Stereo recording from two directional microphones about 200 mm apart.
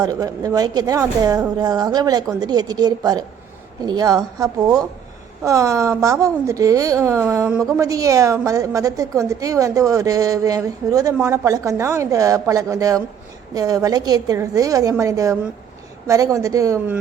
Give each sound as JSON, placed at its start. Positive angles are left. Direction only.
{"t": 0.0, "sound": "a woman's voice", "side_deg": -20}